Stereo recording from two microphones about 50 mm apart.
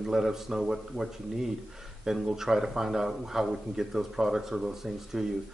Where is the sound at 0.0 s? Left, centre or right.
Centre.